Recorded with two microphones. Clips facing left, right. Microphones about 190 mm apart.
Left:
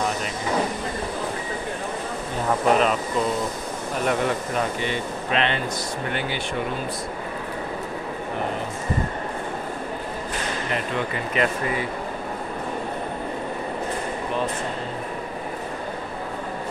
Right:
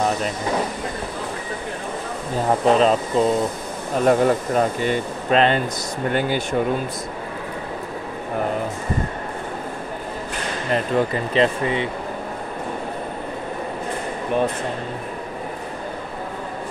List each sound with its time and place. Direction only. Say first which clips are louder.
2.6 s speech: right 3 dB; 30° right (ahead or behind)
10.7 s speech: right 9 dB; 30° right (ahead or behind)